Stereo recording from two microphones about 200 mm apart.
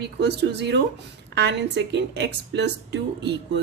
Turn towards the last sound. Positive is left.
turn(degrees=-60)  # may be behind; listen again after turning